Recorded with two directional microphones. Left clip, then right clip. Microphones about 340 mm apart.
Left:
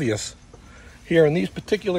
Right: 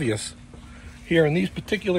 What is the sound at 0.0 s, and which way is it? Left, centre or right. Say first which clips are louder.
Speech: left 2 dB; left.